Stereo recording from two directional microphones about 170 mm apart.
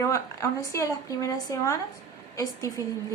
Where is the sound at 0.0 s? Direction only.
20° left (ahead or behind).